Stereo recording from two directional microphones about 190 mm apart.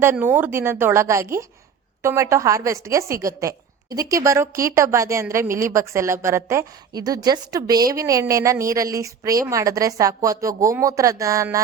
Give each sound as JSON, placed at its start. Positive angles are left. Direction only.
{"t": 0.0, "sound": "a woman's voice", "side_deg": -10}